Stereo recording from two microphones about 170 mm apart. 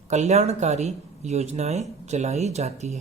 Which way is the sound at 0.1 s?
40° right (ahead or behind).